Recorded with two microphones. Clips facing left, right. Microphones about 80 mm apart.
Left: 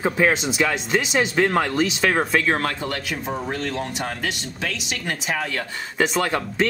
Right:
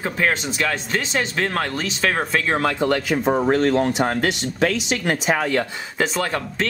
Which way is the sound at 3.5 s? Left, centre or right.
Right.